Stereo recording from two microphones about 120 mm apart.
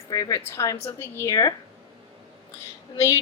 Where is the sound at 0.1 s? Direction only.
30° left (ahead or behind).